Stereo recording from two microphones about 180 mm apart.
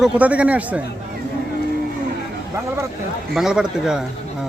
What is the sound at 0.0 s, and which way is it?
Speech, 5° right (ahead or behind).